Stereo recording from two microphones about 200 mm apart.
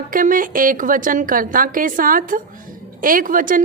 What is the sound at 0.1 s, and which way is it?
A woman's voice, 45° right (ahead or behind).